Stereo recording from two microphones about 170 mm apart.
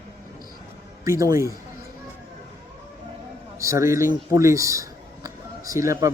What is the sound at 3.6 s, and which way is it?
A man's voice, 15° right (ahead or behind).